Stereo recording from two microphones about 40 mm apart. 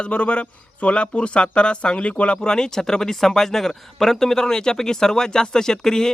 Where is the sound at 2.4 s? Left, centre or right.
Centre.